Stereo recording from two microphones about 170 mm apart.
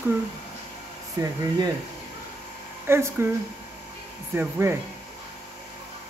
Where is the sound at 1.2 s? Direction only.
20° right (ahead or behind).